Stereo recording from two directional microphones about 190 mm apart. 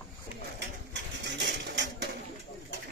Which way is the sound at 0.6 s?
65° right (ahead or behind).